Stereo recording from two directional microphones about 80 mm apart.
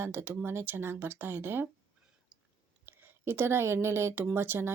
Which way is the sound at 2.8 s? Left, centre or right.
Right.